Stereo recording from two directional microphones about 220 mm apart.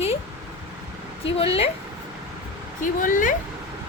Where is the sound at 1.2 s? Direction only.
25° left (ahead or behind).